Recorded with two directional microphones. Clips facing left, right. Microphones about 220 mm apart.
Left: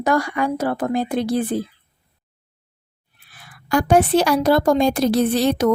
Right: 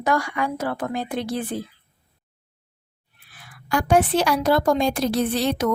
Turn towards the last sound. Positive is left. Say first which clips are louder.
# left 5 dB
turn(degrees=40)  # may be behind; listen again after turning